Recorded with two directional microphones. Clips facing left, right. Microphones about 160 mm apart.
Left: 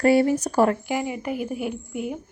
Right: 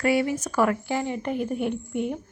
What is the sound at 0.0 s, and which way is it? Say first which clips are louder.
Speech: left 5 dB; 35° left (ahead or behind).